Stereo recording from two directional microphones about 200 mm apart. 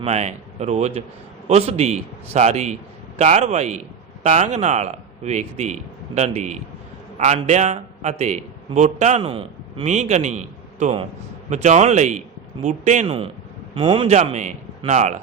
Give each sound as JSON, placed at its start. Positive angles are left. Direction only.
{"t": 0.0, "sound": "a man's voice", "side_deg": -35}
{"t": 14.2, "sound": "a man's voice", "side_deg": -35}